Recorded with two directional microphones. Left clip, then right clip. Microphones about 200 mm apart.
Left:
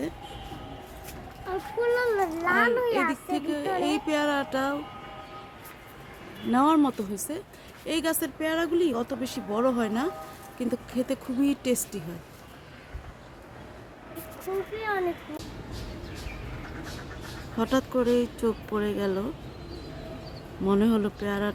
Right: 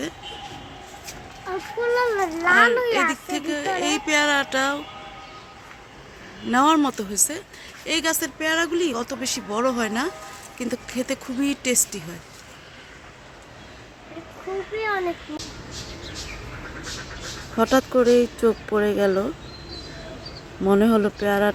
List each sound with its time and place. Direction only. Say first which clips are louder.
1.5 s a child's voice: right 2 dB; 30° right (ahead or behind)
3.2 s speech: right 3 dB; 5° right (ahead or behind)
6.5 s speech: right 4 dB; 5° right (ahead or behind)
14.8 s a child's voice: right 6 dB; 30° right (ahead or behind)
17.6 s speech: right 8 dB; 15° right (ahead or behind)
20.7 s speech: right 7 dB; 10° right (ahead or behind)